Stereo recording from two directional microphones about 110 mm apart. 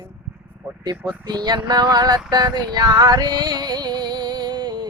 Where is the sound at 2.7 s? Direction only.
40° right (ahead or behind).